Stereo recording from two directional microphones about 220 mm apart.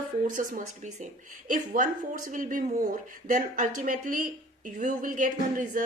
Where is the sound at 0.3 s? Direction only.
35° right (ahead or behind).